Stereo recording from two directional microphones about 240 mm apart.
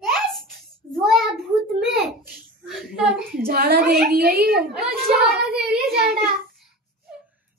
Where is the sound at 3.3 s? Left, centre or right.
Right.